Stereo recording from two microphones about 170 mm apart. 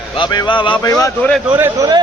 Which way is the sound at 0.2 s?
25° left (ahead or behind).